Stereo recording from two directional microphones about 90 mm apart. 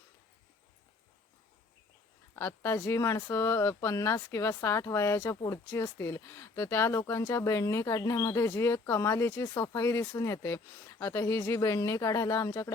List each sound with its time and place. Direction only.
2.3 s speech: 25° left (ahead or behind)